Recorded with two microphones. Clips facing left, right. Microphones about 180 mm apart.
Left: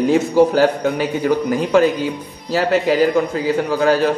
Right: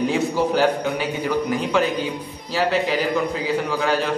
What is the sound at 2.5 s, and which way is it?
Speech, 45° left (ahead or behind).